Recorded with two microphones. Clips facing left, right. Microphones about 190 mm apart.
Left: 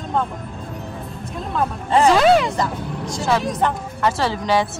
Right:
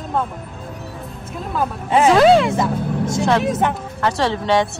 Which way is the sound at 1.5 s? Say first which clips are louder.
Right 1 dB; 5° right (ahead or behind).